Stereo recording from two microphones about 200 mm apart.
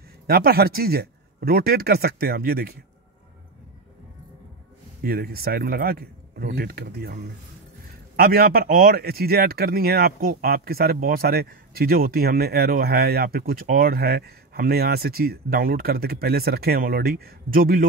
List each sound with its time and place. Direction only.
0.3 s speech: 50° right (ahead or behind)
5.0 s speech: 50° right (ahead or behind)
8.2 s speech: 45° right (ahead or behind)